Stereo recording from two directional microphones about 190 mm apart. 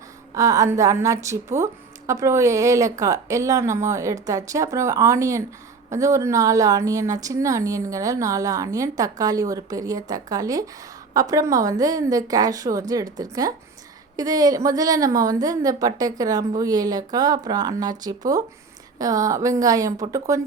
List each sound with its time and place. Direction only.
0.3 s a woman's voice: 15° right (ahead or behind)